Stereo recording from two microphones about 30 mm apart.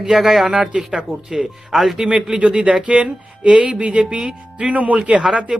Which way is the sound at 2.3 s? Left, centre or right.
Right.